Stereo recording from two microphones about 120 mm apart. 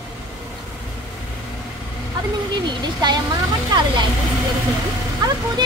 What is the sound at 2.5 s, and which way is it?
A woman's voice, 35° right (ahead or behind).